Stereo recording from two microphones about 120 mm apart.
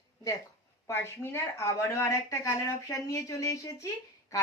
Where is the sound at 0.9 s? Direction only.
20° left (ahead or behind).